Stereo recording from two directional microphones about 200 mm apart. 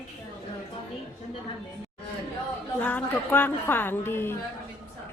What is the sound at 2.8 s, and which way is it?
A woman's voice, 10° left (ahead or behind).